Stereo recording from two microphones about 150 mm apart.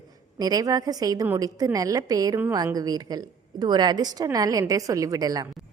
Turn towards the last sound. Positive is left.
turn(degrees=-25)  # may be behind; listen again after turning